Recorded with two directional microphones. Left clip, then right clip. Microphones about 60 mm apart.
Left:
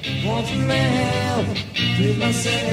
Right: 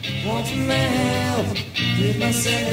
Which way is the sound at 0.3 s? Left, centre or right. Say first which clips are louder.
Even; left.